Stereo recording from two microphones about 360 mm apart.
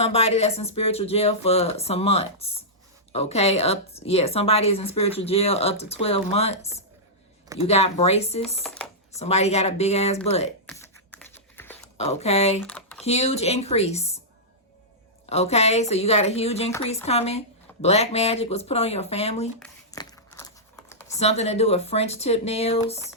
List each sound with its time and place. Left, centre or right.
0.0 s a woman's voice: centre
8.6 s a sound: centre
9.1 s a woman's voice: centre
10.7 s a sound: centre
11.9 s a woman's voice: centre
12.5 s computer keyboard: centre
13.1 s a woman's voice: centre
15.3 s a woman's voice: centre
19.5 s crumpling: centre
20.9 s computer keyboard: centre
21.2 s a woman's voice: centre